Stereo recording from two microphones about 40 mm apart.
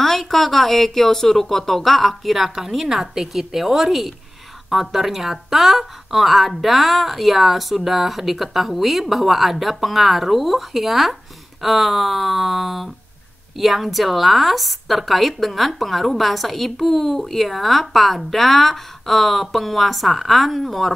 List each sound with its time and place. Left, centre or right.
0.0 s a woman's voice: centre